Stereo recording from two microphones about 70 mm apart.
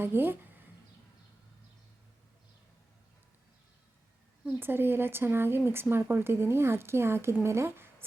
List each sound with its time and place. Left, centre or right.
0.0 s speech: right
4.6 s speech: right